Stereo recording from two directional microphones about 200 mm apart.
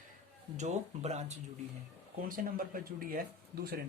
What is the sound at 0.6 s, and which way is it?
Speech, 35° right (ahead or behind).